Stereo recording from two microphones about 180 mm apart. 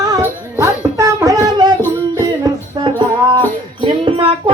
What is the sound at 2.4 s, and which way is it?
Music, 25° right (ahead or behind).